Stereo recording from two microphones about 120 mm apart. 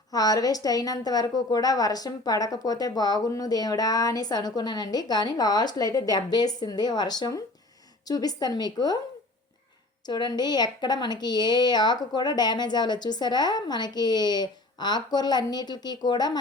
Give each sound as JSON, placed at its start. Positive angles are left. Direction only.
{"t": 0.1, "sound": "speech", "side_deg": 30}
{"t": 10.1, "sound": "speech", "side_deg": 35}